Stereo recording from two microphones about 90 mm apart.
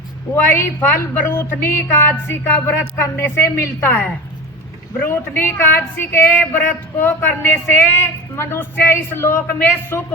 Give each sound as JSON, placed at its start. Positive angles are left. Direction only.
{"t": 0.5, "sound": "a woman's voice", "side_deg": 25}